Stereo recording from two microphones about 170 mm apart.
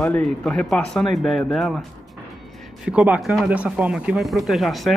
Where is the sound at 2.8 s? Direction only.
5° right (ahead or behind).